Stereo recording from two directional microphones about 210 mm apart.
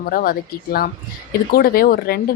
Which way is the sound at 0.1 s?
45° left (ahead or behind).